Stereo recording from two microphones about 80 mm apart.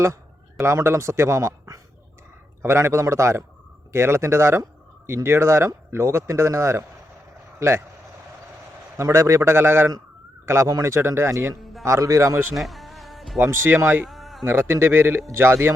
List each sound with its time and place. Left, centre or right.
0.6 s speech: right
9.0 s speech: right
11.6 s a sound: centre
11.9 s speech: right
12.5 s music: centre
13.4 s a man's voice: right
14.0 s a sound: centre
14.4 s a man's voice: right